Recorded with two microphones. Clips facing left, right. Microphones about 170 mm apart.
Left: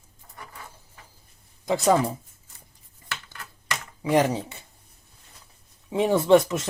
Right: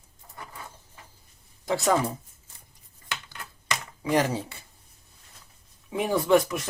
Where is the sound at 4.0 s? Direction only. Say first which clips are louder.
Left 3 dB; 20° left (ahead or behind).